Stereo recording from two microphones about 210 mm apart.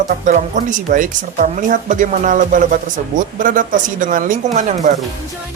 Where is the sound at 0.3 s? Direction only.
35° right (ahead or behind).